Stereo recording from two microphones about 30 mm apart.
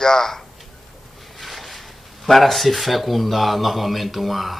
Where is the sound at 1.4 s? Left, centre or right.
Centre.